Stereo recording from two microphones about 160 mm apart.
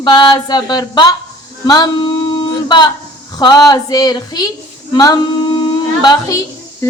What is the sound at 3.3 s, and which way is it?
Speech, 25° left (ahead or behind).